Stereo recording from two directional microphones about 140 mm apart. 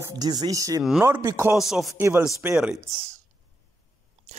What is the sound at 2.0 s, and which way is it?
Speech, 15° right (ahead or behind).